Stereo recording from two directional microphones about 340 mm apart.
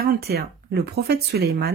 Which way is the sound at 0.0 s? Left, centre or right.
Right.